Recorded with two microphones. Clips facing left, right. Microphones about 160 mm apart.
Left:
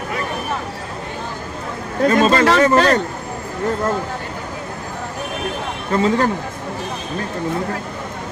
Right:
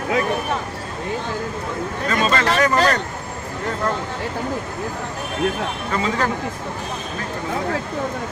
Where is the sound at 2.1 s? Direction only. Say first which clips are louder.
Left 5 dB; 35° left (ahead or behind).